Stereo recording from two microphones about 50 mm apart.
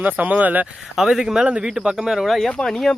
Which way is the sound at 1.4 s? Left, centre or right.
Right.